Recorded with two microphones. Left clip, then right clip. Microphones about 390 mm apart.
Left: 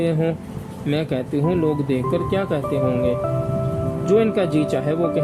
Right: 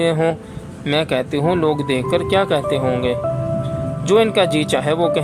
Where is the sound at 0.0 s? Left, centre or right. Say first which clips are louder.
Right 5 dB; centre.